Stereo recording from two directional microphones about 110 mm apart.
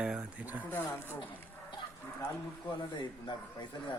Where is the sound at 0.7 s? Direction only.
20° left (ahead or behind).